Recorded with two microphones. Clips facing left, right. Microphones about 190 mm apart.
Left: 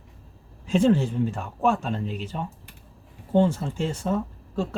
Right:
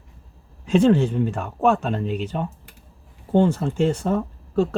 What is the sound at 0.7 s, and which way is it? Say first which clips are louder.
Speech: right 4 dB; 70° right (ahead or behind).